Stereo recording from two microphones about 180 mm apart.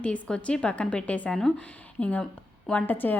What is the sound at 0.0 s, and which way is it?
A woman's voice, 5° left (ahead or behind).